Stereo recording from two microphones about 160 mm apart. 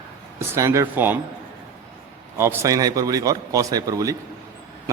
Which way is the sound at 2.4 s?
15° right (ahead or behind).